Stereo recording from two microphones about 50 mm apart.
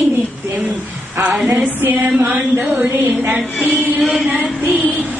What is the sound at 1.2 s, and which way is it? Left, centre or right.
Music, centre.